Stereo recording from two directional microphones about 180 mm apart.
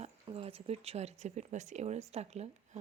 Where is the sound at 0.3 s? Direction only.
30° right (ahead or behind).